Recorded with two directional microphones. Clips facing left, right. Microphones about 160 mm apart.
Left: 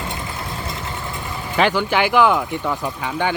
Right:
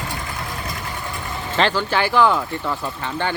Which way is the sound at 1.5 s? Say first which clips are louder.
Left 2 dB; 15° left (ahead or behind).